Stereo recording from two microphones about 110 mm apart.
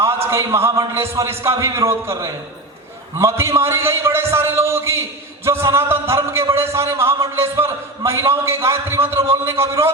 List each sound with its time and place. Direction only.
0.0 s a man's voice: 25° right (ahead or behind)